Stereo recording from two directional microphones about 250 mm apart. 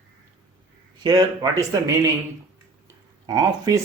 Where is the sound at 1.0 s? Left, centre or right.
Centre.